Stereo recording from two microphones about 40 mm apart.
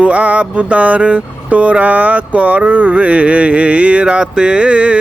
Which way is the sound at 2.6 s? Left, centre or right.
Right.